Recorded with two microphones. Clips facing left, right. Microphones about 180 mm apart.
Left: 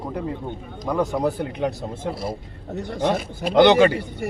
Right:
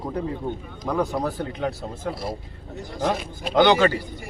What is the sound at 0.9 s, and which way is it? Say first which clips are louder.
Speech: left 3 dB; 10° left (ahead or behind).